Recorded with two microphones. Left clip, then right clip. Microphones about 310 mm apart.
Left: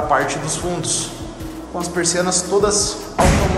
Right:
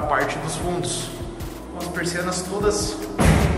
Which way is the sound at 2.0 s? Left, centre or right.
Centre.